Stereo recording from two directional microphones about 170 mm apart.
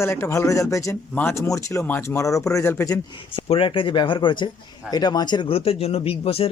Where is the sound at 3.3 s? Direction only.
35° left (ahead or behind).